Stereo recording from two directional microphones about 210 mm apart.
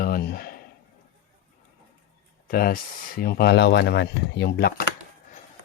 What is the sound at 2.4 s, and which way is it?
Speech, 40° left (ahead or behind).